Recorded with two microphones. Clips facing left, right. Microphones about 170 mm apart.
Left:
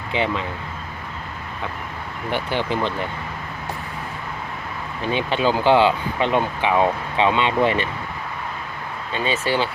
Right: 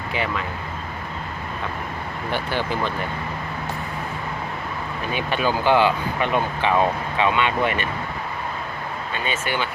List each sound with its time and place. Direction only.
0.1 s speech: 25° left (ahead or behind)
2.3 s speech: 20° left (ahead or behind)
5.1 s speech: 20° left (ahead or behind)
9.1 s speech: 30° left (ahead or behind)